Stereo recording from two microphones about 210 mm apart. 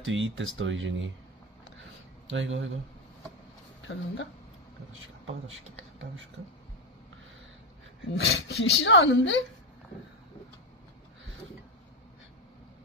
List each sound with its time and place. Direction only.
0.0 s speech: 65° right (ahead or behind)
2.2 s speech: 65° right (ahead or behind)
3.8 s a woman's voice: 65° left (ahead or behind)
4.9 s a man's voice: 70° right (ahead or behind)
8.2 s a woman's voice: 55° left (ahead or behind)